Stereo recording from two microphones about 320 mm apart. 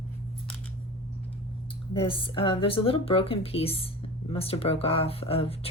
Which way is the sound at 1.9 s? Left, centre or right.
Centre.